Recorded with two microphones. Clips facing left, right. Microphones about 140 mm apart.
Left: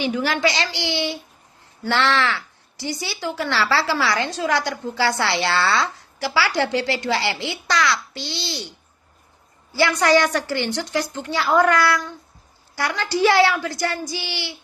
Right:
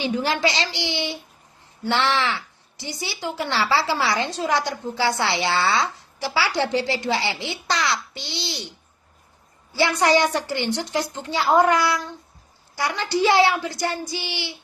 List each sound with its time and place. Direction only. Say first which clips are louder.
0.0 s a woman's voice: left 1 dB; 25° right (ahead or behind)
9.7 s a woman's voice: left 1 dB; 20° right (ahead or behind)